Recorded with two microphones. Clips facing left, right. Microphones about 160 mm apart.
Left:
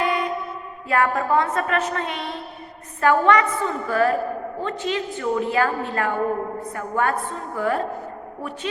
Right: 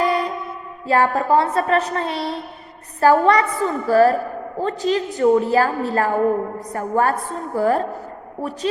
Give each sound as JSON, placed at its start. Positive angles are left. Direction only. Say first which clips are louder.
{"t": 0.0, "sound": "music", "louder": "right 3 dB", "side_deg": -35}
{"t": 0.9, "sound": "a woman's voice", "louder": "right 4 dB", "side_deg": -30}